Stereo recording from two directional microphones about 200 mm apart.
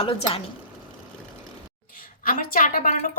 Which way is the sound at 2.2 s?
45° left (ahead or behind).